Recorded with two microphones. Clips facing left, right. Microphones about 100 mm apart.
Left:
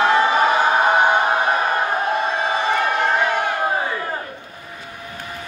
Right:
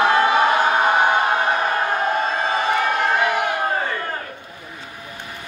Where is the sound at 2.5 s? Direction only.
5° left (ahead or behind).